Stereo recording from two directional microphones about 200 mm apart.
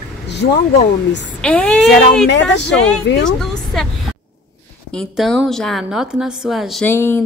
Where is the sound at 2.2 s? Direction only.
60° left (ahead or behind).